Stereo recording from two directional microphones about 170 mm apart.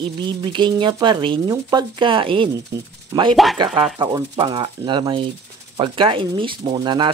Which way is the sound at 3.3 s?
Centre (ahead or behind).